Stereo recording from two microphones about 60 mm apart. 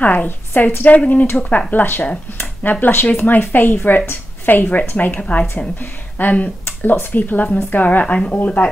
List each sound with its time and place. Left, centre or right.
0.0 s a woman's voice: left
5.2 s speech: centre
6.1 s a woman's voice: left